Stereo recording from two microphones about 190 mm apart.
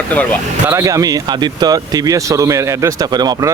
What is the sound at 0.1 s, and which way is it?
Speech, 10° left (ahead or behind).